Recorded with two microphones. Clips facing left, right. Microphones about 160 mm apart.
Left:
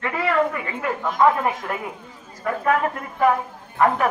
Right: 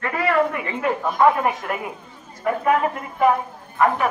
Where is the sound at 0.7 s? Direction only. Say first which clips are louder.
Right 3 dB; 20° right (ahead or behind).